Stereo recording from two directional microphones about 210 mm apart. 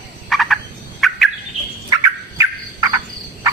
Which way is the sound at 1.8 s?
15° right (ahead or behind).